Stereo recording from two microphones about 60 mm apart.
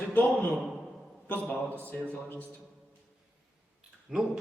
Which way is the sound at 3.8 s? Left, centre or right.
Centre.